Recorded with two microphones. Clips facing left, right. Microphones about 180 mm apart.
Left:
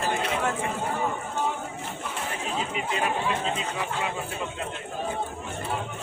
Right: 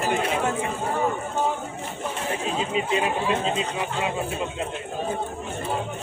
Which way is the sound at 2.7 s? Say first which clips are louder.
Right 5 dB; 20° right (ahead or behind).